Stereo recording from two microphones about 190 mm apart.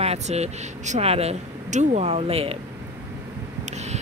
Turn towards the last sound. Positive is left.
turn(degrees=-35)  # may be behind; listen again after turning